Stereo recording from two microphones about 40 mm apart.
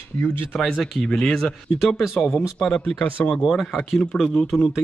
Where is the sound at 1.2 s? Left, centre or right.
Centre.